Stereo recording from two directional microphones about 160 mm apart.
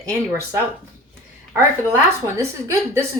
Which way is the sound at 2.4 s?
20° right (ahead or behind).